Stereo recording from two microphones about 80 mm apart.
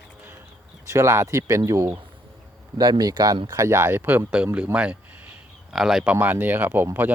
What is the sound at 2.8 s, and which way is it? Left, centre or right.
Speech, right.